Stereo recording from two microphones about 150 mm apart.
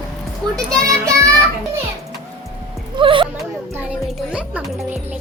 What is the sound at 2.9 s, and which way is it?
Speech, 35° right (ahead or behind).